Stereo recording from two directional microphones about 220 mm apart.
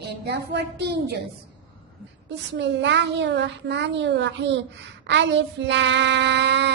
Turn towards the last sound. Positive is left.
turn(degrees=-50)  # may be behind; listen again after turning